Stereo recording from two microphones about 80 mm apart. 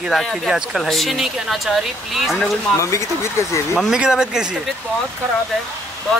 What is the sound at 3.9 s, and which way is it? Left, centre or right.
Speech, centre.